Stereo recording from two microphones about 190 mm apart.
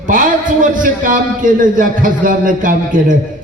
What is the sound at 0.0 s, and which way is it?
A man's voice, 45° right (ahead or behind).